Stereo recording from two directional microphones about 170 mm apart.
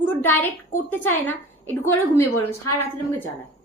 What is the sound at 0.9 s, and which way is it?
A woman's voice, 10° left (ahead or behind).